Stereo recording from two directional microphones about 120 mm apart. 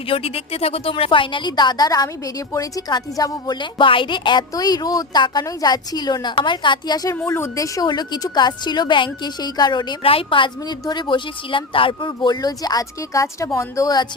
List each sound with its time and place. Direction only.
0.1 s a woman's voice: 50° left (ahead or behind)
10.0 s a woman's voice: 50° left (ahead or behind); by 14.1 s 35° left (ahead or behind)